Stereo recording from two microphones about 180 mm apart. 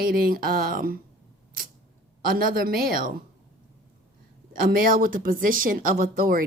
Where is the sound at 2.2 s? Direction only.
50° right (ahead or behind).